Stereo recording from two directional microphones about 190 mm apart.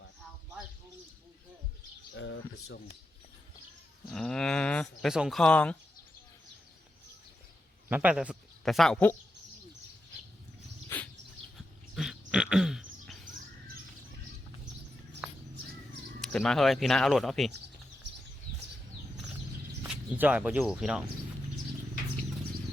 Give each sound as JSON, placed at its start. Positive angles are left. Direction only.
{"t": 2.1, "sound": "speech", "side_deg": 65}
{"t": 4.1, "sound": "speech", "side_deg": 5}
{"t": 7.9, "sound": "a man's voice", "side_deg": -10}
{"t": 10.8, "sound": "bird", "side_deg": 10}
{"t": 11.5, "sound": "a sound", "side_deg": -5}
{"t": 15.2, "sound": "bird", "side_deg": -5}
{"t": 16.2, "sound": "speech", "side_deg": 5}
{"t": 19.9, "sound": "speech", "side_deg": -10}